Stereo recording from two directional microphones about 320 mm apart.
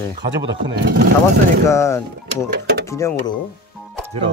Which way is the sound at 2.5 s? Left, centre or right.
Right.